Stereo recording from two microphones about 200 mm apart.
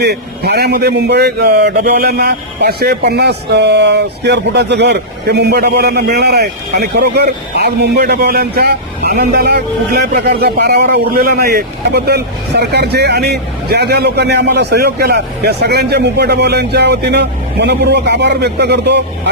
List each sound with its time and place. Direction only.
0.0 s a man's voice: 55° right (ahead or behind)